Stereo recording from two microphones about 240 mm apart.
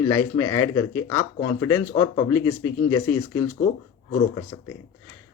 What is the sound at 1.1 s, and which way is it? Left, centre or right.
Speech, left.